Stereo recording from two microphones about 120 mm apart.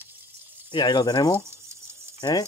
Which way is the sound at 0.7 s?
35° left (ahead or behind).